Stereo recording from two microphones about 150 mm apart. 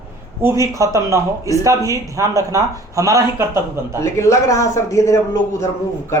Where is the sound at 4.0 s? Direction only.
20° left (ahead or behind).